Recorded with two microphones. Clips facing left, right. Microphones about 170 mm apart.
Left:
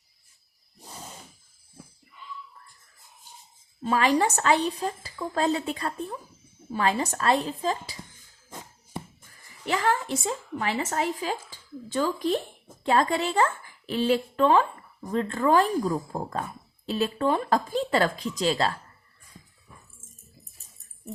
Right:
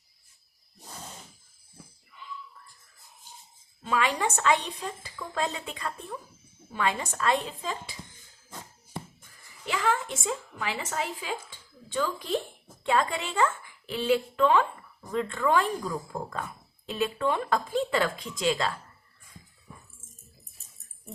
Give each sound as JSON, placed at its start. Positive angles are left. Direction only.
{"t": 0.8, "sound": "a sound", "side_deg": 5}
{"t": 3.8, "sound": "a woman's voice", "side_deg": 40}
{"t": 8.4, "sound": "music", "side_deg": 15}
{"t": 9.6, "sound": "a woman's voice", "side_deg": 40}